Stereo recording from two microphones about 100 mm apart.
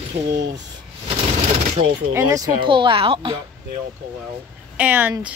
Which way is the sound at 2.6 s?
55° right (ahead or behind).